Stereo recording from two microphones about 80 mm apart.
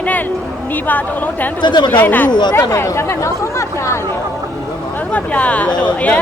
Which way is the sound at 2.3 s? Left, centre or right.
Left.